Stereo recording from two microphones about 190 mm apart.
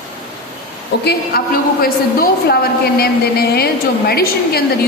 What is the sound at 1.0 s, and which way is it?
A woman's voice, 55° left (ahead or behind).